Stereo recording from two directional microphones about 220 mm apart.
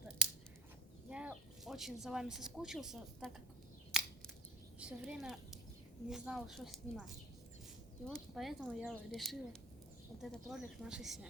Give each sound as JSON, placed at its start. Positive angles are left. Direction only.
{"t": 1.1, "sound": "speech", "side_deg": -5}
{"t": 3.9, "sound": "a sound", "side_deg": -5}
{"t": 4.8, "sound": "a child's voice", "side_deg": -5}